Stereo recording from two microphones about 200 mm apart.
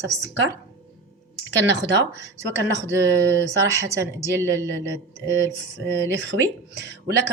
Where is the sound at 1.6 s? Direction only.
65° right (ahead or behind).